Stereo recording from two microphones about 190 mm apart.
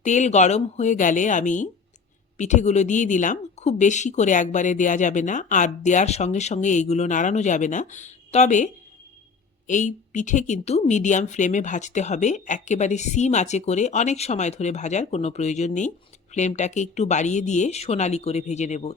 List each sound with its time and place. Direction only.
0.0 s speech: 40° left (ahead or behind)